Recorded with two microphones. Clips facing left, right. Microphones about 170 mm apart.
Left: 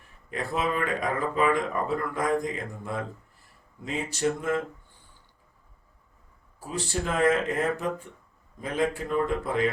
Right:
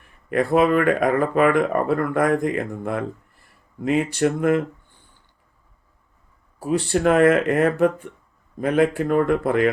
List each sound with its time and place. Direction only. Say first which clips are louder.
0.3 s speech: right 11 dB; 60° right (ahead or behind)
6.6 s speech: right 10 dB; 65° right (ahead or behind)